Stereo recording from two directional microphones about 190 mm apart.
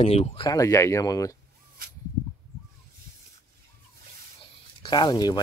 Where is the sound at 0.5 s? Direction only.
15° left (ahead or behind).